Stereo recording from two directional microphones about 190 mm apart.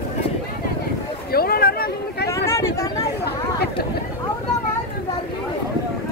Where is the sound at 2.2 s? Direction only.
15° left (ahead or behind).